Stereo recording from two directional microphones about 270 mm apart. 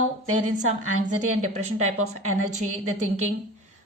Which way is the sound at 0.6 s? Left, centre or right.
Right.